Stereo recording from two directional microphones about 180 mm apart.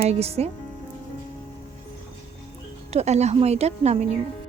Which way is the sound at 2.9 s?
40° right (ahead or behind).